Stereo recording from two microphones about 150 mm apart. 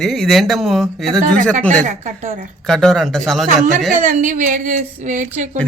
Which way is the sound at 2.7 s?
5° left (ahead or behind).